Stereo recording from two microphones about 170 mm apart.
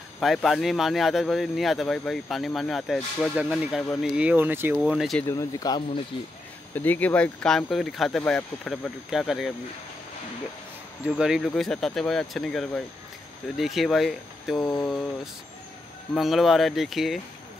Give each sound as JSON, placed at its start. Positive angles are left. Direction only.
{"t": 0.2, "sound": "speech", "side_deg": 0}
{"t": 4.7, "sound": "speech", "side_deg": 0}
{"t": 5.2, "sound": "speech", "side_deg": 20}
{"t": 6.7, "sound": "speech", "side_deg": 10}
{"t": 11.1, "sound": "speech", "side_deg": -5}
{"t": 16.2, "sound": "speech", "side_deg": 0}